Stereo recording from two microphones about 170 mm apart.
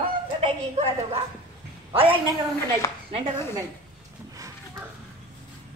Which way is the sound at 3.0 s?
30° right (ahead or behind).